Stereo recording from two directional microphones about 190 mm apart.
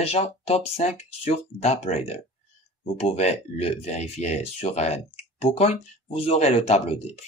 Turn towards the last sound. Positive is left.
turn(degrees=35)  # may be behind; listen again after turning